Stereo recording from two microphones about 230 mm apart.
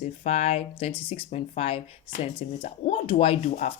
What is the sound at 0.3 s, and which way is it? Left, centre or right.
Speech, left.